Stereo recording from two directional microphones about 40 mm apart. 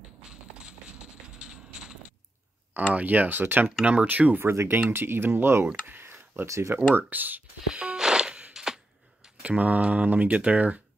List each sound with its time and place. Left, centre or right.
0.3 s a sound: right
2.9 s speech: right
3.8 s mantra: right
4.4 s speech: right
4.7 s speech: right
5.9 s a sound: right
7.1 s speech: right
7.7 s music: right
9.4 s mantra: right
10.0 s speech: right
10.3 s mantra: right